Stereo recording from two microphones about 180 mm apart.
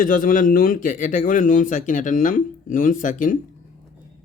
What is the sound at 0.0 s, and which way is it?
A man's voice, 50° left (ahead or behind).